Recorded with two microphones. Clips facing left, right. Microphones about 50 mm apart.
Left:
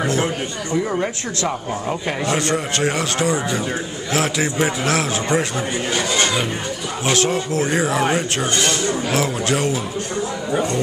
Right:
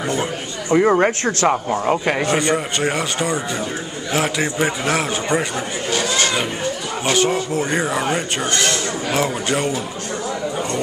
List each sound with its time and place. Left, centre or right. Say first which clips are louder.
0.0 s speech: left 2 dB; centre
0.7 s speech: right 7 dB; right
1.9 s speech: right 5 dB; right
2.2 s speech: right 2 dB; centre
7.1 s speech: right 1 dB; centre